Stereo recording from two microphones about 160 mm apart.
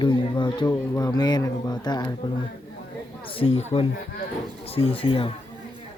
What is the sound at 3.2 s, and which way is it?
Speech, 35° left (ahead or behind).